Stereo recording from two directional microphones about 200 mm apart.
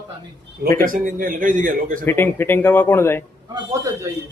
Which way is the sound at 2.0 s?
10° left (ahead or behind).